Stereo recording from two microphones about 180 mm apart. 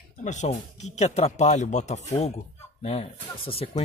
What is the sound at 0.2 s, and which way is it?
Speech, 40° left (ahead or behind).